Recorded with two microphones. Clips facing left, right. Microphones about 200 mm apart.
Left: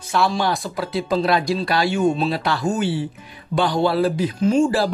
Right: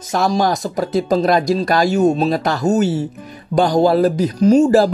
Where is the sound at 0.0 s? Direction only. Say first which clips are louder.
Right 4 dB; 40° right (ahead or behind).